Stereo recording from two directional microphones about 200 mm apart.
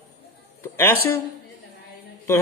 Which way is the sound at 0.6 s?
10° left (ahead or behind).